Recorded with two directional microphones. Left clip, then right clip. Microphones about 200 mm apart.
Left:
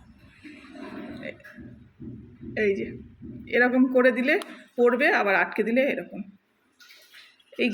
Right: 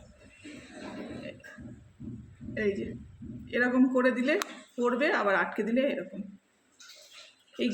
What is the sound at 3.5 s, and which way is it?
Speech, 10° left (ahead or behind).